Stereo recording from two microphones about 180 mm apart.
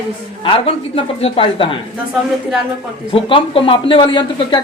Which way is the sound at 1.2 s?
30° left (ahead or behind).